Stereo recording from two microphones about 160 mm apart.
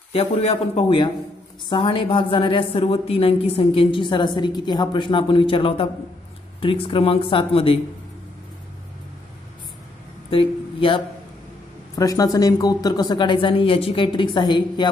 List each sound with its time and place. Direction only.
0.1 s a woman's voice: 35° left (ahead or behind)
10.3 s speech: 35° left (ahead or behind)
11.9 s speech: 20° left (ahead or behind)